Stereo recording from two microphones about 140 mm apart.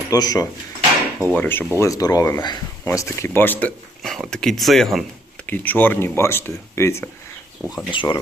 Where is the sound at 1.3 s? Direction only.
15° left (ahead or behind).